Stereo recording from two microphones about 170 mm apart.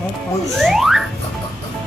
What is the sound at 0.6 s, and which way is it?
Speech, centre (ahead or behind).